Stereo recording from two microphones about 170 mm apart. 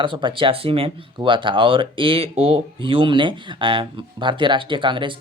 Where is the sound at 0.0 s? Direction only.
30° right (ahead or behind).